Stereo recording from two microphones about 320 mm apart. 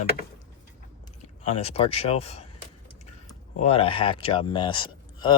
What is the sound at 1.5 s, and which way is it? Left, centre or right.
Speech, centre.